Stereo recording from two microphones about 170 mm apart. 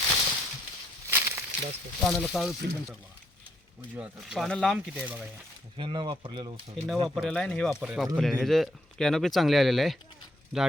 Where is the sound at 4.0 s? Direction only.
15° right (ahead or behind).